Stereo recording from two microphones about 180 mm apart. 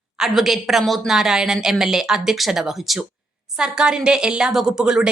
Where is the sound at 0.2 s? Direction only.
Centre (ahead or behind).